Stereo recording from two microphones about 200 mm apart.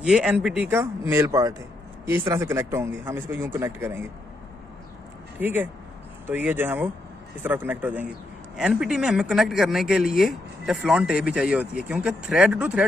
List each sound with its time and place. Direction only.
0.0 s speech: 5° right (ahead or behind); by 2.5 s 25° right (ahead or behind)
2.5 s speech: 15° right (ahead or behind)
5.4 s speech: 10° right (ahead or behind)